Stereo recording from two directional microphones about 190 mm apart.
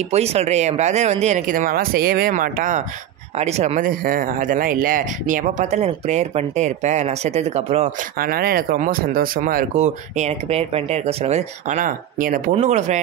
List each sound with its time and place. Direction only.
0.1 s speech: 35° right (ahead or behind)
8.2 s speech: 50° right (ahead or behind)